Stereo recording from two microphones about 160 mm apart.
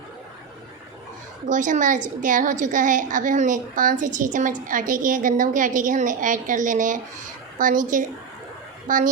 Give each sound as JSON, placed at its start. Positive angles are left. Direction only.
{"t": 1.5, "sound": "a woman's voice", "side_deg": -50}